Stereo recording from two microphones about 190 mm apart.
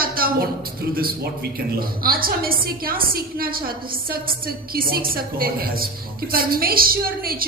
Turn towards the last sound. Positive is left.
turn(degrees=-50)  # may be behind; listen again after turning